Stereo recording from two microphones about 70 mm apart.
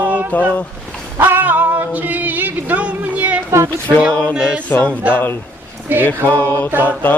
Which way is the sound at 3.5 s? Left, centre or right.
Right.